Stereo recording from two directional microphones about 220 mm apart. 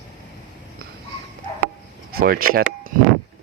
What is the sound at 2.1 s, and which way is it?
Speech, 40° right (ahead or behind).